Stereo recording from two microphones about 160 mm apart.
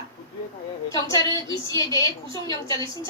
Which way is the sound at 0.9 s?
25° left (ahead or behind).